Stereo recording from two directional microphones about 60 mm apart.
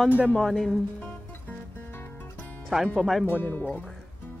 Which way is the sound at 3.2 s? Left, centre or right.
Left.